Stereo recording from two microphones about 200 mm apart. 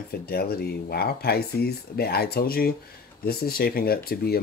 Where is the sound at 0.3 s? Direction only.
50° left (ahead or behind).